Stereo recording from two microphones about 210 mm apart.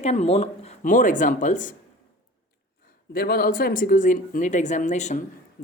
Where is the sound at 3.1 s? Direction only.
45° left (ahead or behind).